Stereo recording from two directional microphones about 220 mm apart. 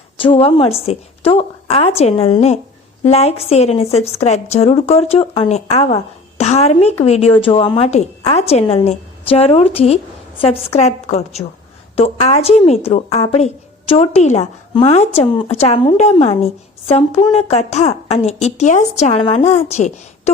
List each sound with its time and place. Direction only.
0.2 s a woman's voice: 25° left (ahead or behind)